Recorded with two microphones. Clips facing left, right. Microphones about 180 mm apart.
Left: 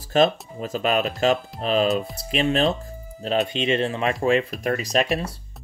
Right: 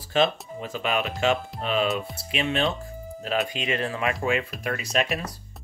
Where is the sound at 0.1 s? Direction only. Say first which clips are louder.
Left 4 dB; 40° left (ahead or behind).